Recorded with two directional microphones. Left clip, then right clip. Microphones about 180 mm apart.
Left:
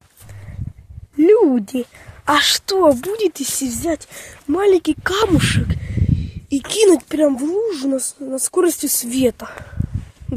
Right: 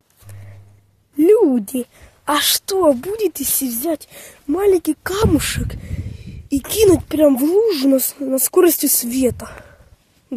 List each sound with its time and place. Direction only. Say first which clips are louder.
1.1 s a woman's voice: even; 10° right (ahead or behind)
7.2 s speech: right 6 dB; 45° right (ahead or behind)
9.1 s speech: left 4 dB; 10° right (ahead or behind)